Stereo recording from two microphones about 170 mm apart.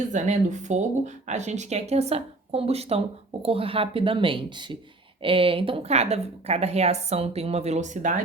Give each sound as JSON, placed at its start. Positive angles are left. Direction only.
{"t": 0.1, "sound": "a woman's voice", "side_deg": -45}